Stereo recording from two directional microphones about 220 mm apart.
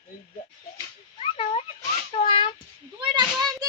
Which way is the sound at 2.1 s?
20° left (ahead or behind).